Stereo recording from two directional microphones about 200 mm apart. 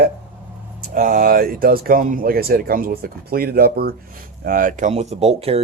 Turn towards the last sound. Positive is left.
turn(degrees=-30)  # may be behind; listen again after turning